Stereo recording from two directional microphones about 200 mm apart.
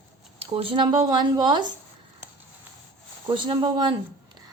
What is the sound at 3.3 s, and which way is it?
Speech, 25° right (ahead or behind).